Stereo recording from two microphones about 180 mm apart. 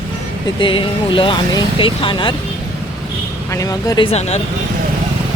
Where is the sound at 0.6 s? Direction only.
30° left (ahead or behind).